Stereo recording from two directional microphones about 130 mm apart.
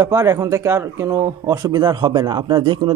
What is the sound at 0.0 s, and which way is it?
Speech, 25° right (ahead or behind).